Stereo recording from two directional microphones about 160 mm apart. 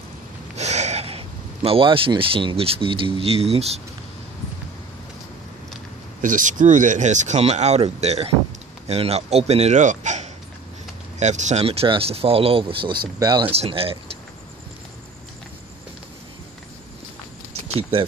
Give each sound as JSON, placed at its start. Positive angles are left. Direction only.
{"t": 0.6, "sound": "speech", "side_deg": -45}
{"t": 6.2, "sound": "speech", "side_deg": -55}
{"t": 13.5, "sound": "speech", "side_deg": -35}